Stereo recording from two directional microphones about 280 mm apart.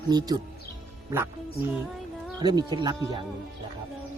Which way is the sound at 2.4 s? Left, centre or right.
Centre.